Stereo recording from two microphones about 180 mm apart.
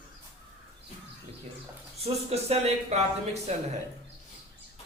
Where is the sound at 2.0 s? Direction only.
35° right (ahead or behind).